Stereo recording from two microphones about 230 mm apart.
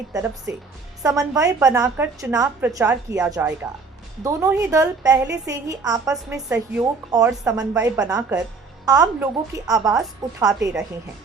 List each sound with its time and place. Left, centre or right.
0.1 s a woman's voice: centre